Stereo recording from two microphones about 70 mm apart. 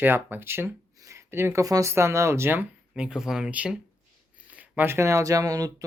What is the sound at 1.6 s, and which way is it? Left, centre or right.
Speech, right.